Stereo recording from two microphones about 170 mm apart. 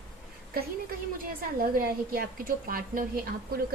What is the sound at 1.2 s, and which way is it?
A woman's voice, 55° right (ahead or behind).